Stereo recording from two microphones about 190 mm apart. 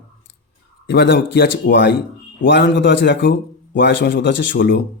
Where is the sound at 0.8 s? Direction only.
65° left (ahead or behind).